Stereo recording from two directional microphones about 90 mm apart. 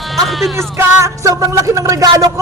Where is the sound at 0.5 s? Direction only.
35° right (ahead or behind).